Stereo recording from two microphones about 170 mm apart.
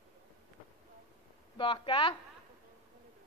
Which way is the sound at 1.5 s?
30° left (ahead or behind).